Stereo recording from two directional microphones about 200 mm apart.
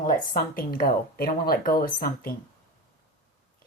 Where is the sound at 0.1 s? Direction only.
45° left (ahead or behind).